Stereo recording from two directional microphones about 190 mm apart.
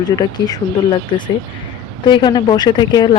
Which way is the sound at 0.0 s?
20° left (ahead or behind).